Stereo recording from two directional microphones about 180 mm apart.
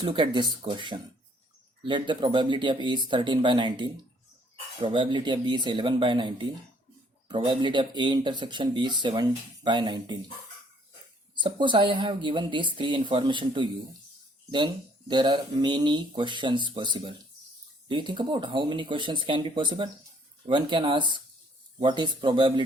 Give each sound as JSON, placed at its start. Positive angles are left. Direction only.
{"t": 0.0, "sound": "speech", "side_deg": -30}
{"t": 11.3, "sound": "speech", "side_deg": -25}